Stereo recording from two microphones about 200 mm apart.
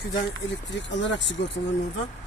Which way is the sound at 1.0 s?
65° left (ahead or behind).